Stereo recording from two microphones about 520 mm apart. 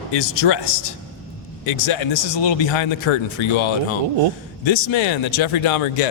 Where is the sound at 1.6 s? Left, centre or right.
Left.